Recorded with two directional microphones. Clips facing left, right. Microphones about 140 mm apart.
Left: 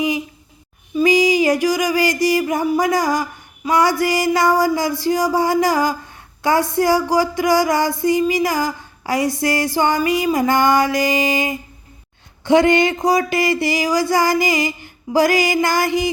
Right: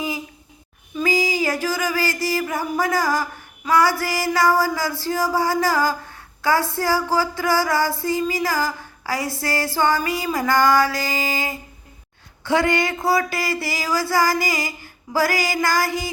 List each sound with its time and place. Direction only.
0.9 s music: 20° left (ahead or behind)